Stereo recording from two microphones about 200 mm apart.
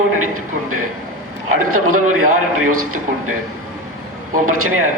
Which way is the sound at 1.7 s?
90° right.